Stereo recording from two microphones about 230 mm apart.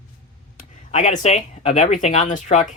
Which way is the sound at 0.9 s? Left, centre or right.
Left.